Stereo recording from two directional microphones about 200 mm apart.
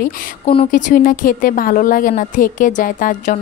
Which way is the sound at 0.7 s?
40° left (ahead or behind).